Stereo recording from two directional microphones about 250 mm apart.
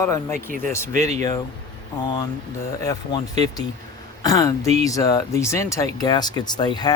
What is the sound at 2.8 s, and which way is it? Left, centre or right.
Speech, centre.